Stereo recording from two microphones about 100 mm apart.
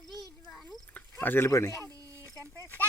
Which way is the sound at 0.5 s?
Centre (ahead or behind).